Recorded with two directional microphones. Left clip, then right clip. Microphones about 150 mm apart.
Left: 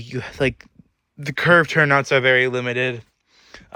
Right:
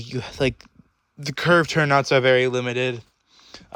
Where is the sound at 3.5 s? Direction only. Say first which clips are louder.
Left 1 dB; 35° right (ahead or behind).